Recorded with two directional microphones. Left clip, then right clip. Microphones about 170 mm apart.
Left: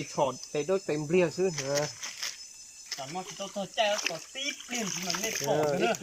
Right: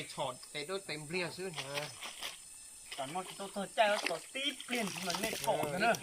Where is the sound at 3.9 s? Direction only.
25° right (ahead or behind).